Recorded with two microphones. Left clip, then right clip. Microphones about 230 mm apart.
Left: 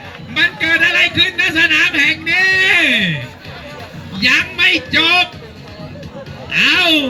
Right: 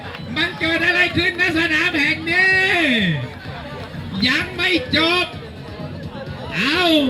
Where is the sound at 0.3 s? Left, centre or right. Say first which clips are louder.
Left 7 dB; left.